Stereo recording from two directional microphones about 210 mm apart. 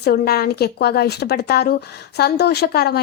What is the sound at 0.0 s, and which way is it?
A woman's voice, 50° left (ahead or behind).